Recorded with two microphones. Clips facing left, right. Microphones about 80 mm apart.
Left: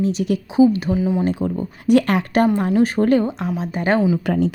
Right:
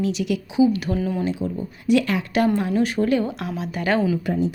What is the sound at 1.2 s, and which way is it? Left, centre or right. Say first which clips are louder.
Speech: left 4 dB; left.